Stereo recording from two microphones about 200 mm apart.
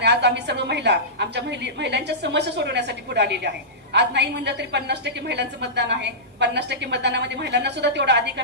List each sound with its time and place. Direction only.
0.0 s a woman's voice: 60° right (ahead or behind)